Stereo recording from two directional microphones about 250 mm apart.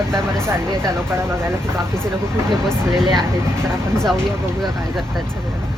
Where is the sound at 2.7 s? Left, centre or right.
Centre.